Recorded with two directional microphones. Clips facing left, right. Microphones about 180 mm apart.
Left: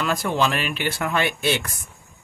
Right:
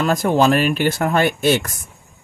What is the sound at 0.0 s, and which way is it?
Speech, 45° right (ahead or behind).